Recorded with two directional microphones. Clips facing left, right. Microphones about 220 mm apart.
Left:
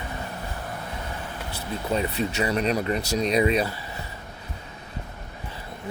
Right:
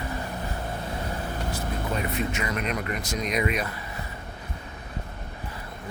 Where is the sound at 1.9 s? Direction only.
30° left (ahead or behind).